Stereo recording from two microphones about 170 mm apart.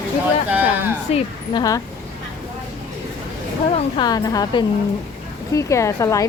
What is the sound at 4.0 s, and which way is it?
A woman's voice, 20° left (ahead or behind).